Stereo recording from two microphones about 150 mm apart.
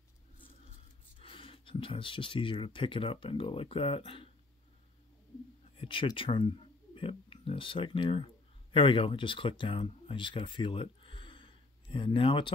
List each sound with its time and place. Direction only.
1.2 s speech: 35° left (ahead or behind)
5.8 s speech: 35° left (ahead or behind)